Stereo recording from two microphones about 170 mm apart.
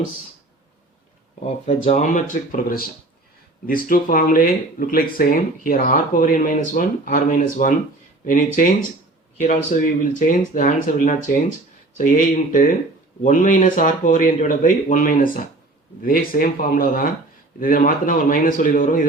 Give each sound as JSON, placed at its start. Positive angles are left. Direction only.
{"t": 1.6, "sound": "speech", "side_deg": 40}